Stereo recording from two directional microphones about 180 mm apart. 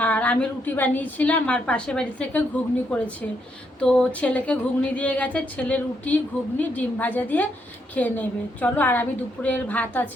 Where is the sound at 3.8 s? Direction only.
5° left (ahead or behind).